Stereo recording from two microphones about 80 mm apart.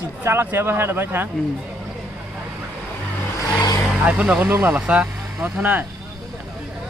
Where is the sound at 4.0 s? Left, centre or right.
Centre.